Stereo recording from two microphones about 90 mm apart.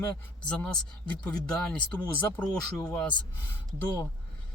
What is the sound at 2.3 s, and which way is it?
Speech, 10° left (ahead or behind).